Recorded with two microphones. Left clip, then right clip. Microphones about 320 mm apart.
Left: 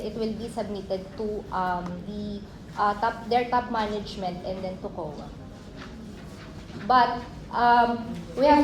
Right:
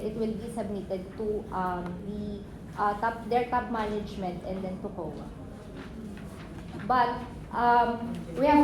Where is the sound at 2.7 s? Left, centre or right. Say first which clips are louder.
Left 3 dB; left.